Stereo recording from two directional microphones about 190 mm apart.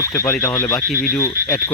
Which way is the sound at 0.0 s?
15° left (ahead or behind).